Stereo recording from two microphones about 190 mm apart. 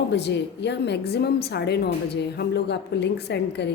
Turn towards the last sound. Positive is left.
turn(degrees=60)  # may be behind; listen again after turning